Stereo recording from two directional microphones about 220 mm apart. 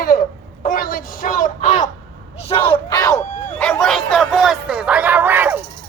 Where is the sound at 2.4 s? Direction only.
25° left (ahead or behind).